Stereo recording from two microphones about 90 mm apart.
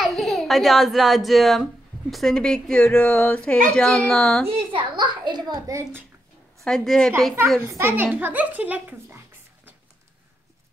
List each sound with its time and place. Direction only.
0.0 s a woman's voice: centre (ahead or behind)
4.5 s a child's voice: 90° right
4.9 s a child's voice: 55° right (ahead or behind)
5.7 s a child's voice: 30° right (ahead or behind)
6.6 s a woman's voice: 5° left (ahead or behind)
7.6 s a child's voice: 30° right (ahead or behind)